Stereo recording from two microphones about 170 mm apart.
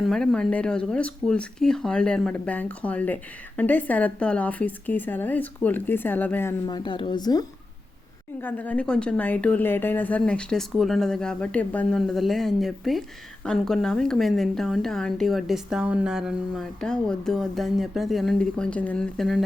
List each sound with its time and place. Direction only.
0.0 s a woman's voice: centre (ahead or behind)
6.7 s speech: 25° left (ahead or behind)
8.4 s a woman's voice: 10° left (ahead or behind)